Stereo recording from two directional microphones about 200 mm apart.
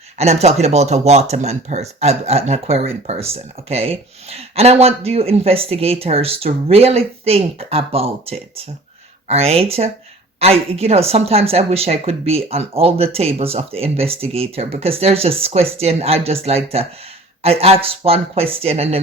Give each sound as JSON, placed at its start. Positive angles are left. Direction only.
{"t": 0.2, "sound": "speech", "side_deg": -30}